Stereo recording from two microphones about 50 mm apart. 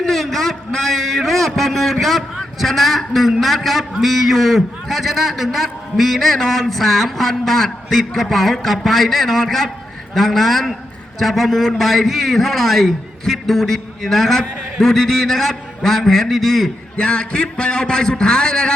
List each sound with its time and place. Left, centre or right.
0.0 s a man's voice: centre
17.0 s a man's voice: centre